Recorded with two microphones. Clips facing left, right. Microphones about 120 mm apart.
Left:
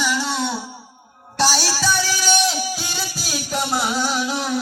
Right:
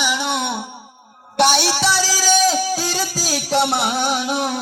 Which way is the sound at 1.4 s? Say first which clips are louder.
Right 4 dB; 60° right (ahead or behind).